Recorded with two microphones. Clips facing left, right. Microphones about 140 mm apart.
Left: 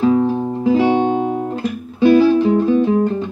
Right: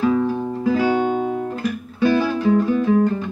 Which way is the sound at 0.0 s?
25° left (ahead or behind).